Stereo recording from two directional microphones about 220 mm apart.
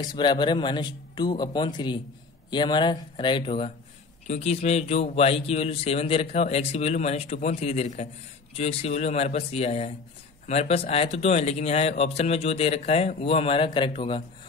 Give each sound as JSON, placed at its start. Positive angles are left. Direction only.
{"t": 0.0, "sound": "speech", "side_deg": 20}